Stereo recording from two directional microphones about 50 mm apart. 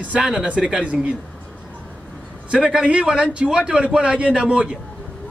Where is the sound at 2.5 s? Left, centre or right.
Centre.